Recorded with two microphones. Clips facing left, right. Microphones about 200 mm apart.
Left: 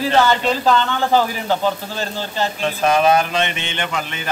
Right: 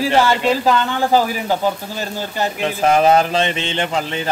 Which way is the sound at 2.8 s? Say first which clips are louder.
Right 2 dB; 25° right (ahead or behind).